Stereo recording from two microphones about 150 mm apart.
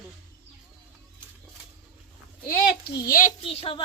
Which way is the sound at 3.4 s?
40° left (ahead or behind).